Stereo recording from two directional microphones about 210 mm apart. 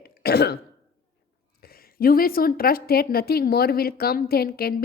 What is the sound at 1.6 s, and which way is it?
Speech, 45° left (ahead or behind).